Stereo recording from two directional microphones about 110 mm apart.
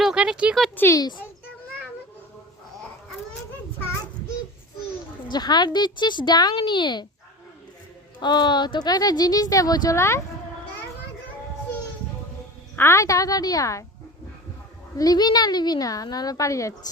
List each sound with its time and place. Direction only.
0.0 s a sound: 5° right (ahead or behind)
0.9 s speech: 40° left (ahead or behind)
5.3 s speech: 40° left (ahead or behind)
8.2 s speech: 40° left (ahead or behind)
10.0 s speech: 25° left (ahead or behind)
12.7 s speech: 25° left (ahead or behind)
14.9 s speech: 35° left (ahead or behind)